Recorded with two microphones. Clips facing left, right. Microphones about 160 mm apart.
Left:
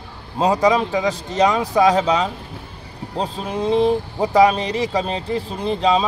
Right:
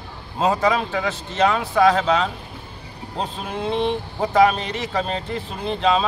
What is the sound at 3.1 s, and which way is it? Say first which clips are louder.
Speech: left 4 dB; 35° left (ahead or behind).